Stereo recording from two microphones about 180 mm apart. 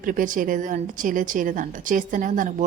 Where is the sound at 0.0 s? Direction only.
50° right (ahead or behind).